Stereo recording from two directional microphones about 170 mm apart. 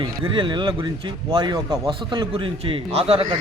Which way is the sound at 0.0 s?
25° right (ahead or behind).